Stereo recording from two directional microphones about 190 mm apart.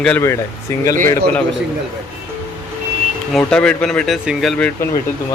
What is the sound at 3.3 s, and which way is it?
Speech, 5° left (ahead or behind).